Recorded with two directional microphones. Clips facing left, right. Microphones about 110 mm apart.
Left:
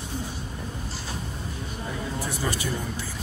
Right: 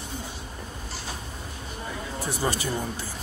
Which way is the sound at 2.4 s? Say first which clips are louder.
Right 3 dB; 30° right (ahead or behind).